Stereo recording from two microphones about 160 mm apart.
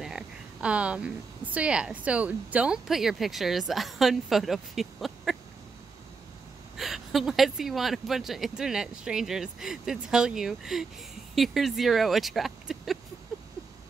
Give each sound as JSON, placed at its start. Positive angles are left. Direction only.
{"t": 0.0, "sound": "a woman's voice", "side_deg": -5}
{"t": 6.8, "sound": "speech", "side_deg": 0}